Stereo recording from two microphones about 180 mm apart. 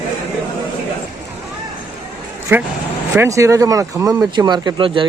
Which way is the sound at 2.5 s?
10° right (ahead or behind).